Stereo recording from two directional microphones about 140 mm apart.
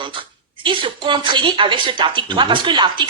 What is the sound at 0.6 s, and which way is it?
Speech, 35° right (ahead or behind).